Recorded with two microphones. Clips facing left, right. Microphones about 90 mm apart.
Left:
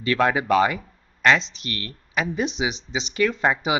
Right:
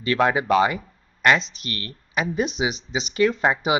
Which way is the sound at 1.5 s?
40° right (ahead or behind).